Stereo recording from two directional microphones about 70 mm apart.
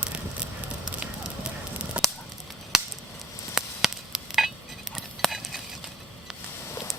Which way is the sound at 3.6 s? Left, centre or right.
Centre.